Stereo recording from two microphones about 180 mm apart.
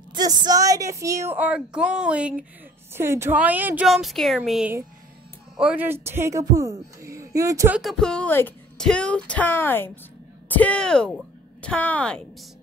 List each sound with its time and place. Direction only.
0.1 s a woman's voice: 25° right (ahead or behind)
7.8 s speech: 5° left (ahead or behind)